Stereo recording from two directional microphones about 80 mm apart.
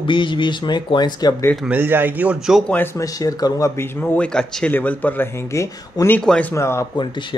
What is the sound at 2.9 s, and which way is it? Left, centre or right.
Speech, left.